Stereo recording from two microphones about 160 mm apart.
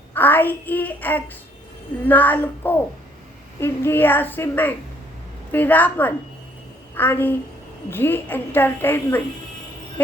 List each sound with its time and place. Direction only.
0.1 s a child's voice: 10° left (ahead or behind)